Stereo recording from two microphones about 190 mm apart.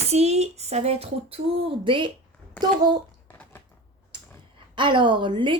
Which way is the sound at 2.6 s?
25° right (ahead or behind).